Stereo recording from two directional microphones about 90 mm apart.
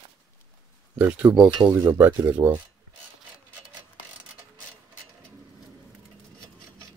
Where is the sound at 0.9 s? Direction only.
15° right (ahead or behind).